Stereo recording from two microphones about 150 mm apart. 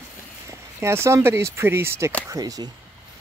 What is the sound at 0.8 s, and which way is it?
Speech, 15° right (ahead or behind).